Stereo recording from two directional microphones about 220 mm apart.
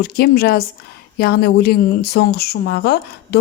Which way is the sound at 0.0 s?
45° left (ahead or behind).